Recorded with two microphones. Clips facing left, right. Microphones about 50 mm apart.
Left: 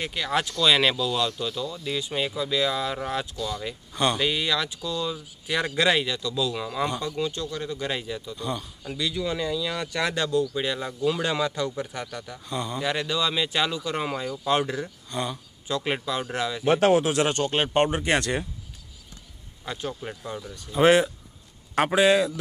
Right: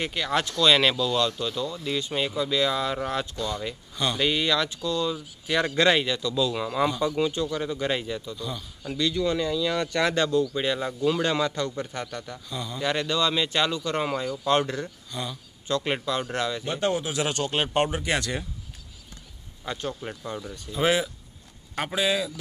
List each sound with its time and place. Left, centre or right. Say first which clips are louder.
0.0 s speech: even; centre
12.4 s speech: left 6 dB; left
12.7 s speech: right 2 dB; centre
17.1 s speech: left 3 dB; left
17.9 s speech: left 3 dB; left
19.6 s speech: right 1 dB; centre